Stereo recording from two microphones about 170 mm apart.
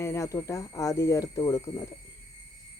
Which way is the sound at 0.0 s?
15° left (ahead or behind).